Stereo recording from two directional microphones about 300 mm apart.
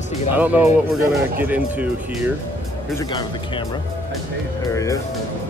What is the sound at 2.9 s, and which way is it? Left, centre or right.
Speech, centre.